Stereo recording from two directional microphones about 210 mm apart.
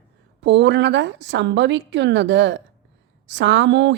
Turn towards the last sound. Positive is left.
turn(degrees=-60)  # may be behind; listen again after turning